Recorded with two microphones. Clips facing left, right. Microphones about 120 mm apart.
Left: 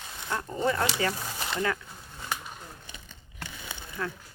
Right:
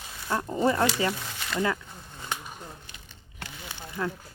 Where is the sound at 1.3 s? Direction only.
30° left (ahead or behind).